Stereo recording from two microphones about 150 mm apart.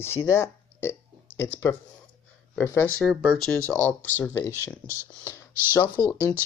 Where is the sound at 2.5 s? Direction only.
15° left (ahead or behind).